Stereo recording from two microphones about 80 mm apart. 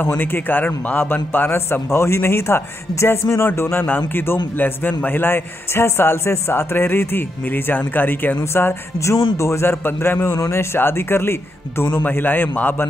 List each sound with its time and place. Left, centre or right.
0.0 s a man's voice: left